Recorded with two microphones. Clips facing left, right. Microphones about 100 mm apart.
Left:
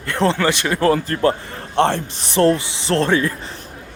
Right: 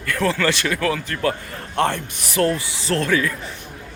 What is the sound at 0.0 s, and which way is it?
Speech, 25° left (ahead or behind).